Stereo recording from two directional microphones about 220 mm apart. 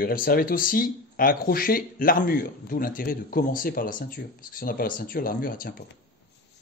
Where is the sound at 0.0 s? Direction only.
40° left (ahead or behind).